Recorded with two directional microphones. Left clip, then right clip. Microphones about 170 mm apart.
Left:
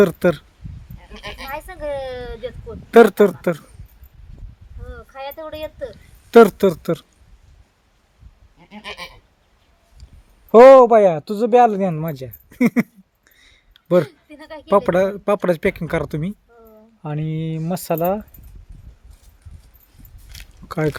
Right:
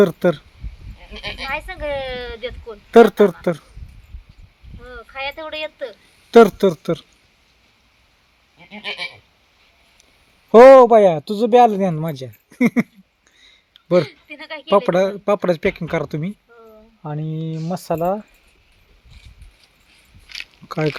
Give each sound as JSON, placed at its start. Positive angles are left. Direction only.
{"t": 0.0, "sound": "speech", "side_deg": 5}
{"t": 1.5, "sound": "speech", "side_deg": 10}
{"t": 4.9, "sound": "speech", "side_deg": 10}
{"t": 8.7, "sound": "goat", "side_deg": -35}
{"t": 10.5, "sound": "speech", "side_deg": -10}
{"t": 17.0, "sound": "speech", "side_deg": 20}